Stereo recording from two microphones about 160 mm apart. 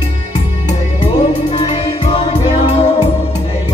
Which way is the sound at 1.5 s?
40° left (ahead or behind).